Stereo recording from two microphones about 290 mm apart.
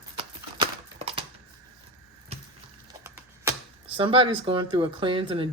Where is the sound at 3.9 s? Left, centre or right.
Centre.